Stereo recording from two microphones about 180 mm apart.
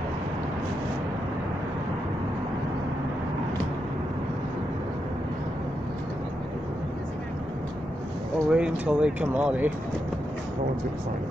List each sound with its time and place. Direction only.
8.5 s speech: 5° right (ahead or behind)